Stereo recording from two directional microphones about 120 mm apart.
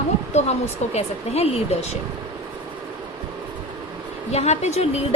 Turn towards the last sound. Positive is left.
turn(degrees=65)  # may be behind; listen again after turning